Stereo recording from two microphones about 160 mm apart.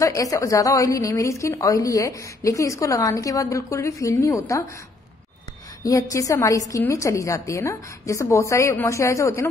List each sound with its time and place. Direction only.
0.0 s a woman's voice: 20° left (ahead or behind)
5.9 s a woman's voice: 20° left (ahead or behind)